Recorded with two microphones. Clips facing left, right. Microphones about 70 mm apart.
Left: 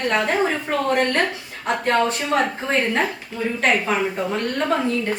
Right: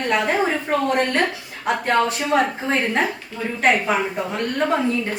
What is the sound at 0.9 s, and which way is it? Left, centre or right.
Speech, centre.